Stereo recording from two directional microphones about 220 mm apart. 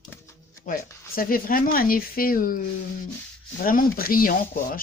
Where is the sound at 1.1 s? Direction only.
40° left (ahead or behind).